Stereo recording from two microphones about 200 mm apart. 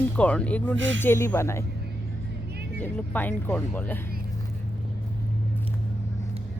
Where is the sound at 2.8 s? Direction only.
10° left (ahead or behind).